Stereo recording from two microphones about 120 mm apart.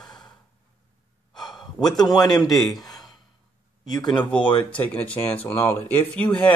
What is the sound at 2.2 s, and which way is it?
Speech, 30° left (ahead or behind).